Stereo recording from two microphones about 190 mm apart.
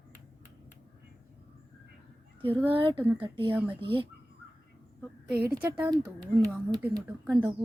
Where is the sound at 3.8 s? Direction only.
30° right (ahead or behind).